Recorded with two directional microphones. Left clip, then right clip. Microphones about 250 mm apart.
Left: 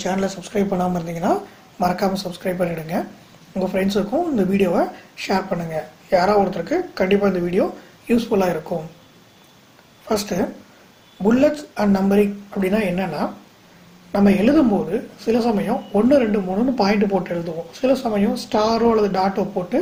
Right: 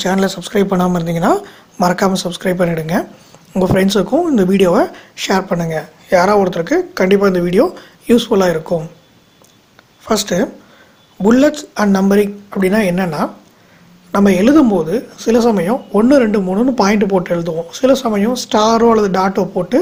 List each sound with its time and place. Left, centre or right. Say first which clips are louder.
0.0 s speech: right 7 dB; right
10.1 s speech: right 6 dB; right